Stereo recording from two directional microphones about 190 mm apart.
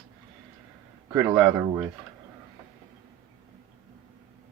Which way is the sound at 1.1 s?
15° right (ahead or behind).